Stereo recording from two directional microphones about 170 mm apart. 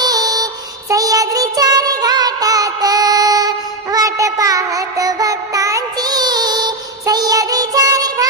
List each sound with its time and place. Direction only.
0.0 s music: 25° right (ahead or behind)
0.9 s child singing: 20° right (ahead or behind)